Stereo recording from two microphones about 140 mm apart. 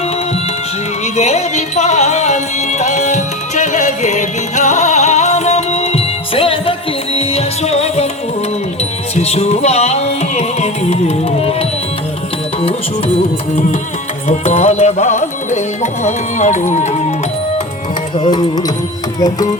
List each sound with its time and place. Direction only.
1.1 s music: 55° left (ahead or behind)
9.1 s music: 50° left (ahead or behind)
14.3 s music: 50° left (ahead or behind)
18.2 s music: 30° left (ahead or behind)